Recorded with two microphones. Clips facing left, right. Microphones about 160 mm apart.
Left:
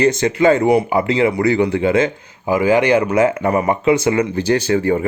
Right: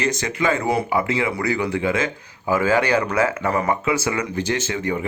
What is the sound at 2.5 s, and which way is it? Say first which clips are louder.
Speech: left 5 dB; 15° left (ahead or behind).